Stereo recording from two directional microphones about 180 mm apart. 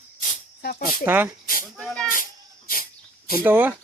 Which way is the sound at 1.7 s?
5° left (ahead or behind).